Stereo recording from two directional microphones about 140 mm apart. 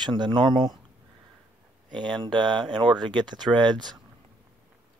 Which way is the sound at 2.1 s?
35° right (ahead or behind).